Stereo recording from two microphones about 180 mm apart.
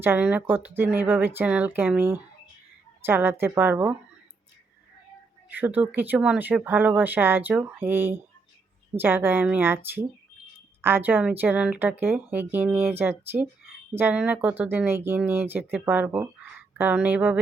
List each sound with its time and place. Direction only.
0.0 s speech: 10° right (ahead or behind)
5.5 s speech: 10° right (ahead or behind)